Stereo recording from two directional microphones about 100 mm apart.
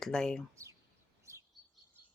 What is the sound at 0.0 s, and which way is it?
Speech, 5° left (ahead or behind).